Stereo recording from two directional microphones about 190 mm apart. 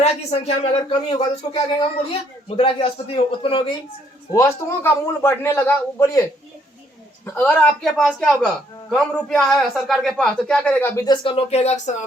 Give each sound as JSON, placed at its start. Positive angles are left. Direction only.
{"t": 0.0, "sound": "a woman's voice", "side_deg": 35}
{"t": 4.3, "sound": "a man's voice", "side_deg": 15}
{"t": 7.3, "sound": "a man's voice", "side_deg": 5}